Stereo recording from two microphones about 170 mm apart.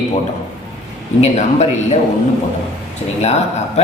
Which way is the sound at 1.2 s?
40° left (ahead or behind).